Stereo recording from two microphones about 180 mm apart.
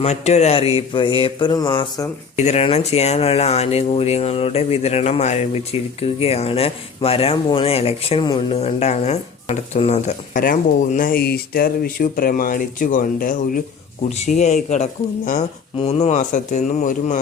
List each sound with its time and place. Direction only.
0.0 s speech: 35° left (ahead or behind)
2.3 s speech: 40° left (ahead or behind)
14.1 s speech: 40° left (ahead or behind)